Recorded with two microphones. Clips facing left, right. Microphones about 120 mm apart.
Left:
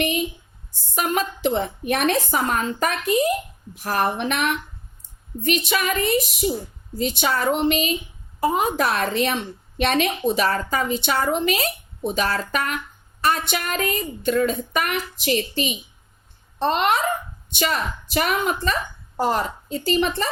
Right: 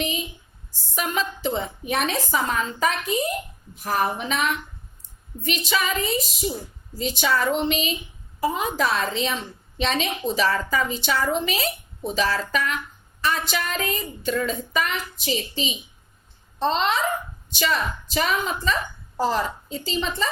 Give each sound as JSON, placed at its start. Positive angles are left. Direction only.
{"t": 0.7, "sound": "a sound", "side_deg": 50}
{"t": 1.4, "sound": "a woman's voice", "side_deg": 65}
{"t": 7.2, "sound": "a woman's voice", "side_deg": 50}